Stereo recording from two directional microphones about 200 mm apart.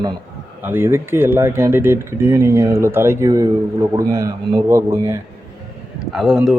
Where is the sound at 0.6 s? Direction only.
10° right (ahead or behind).